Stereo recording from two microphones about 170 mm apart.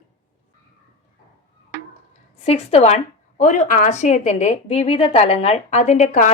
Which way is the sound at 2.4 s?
35° left (ahead or behind).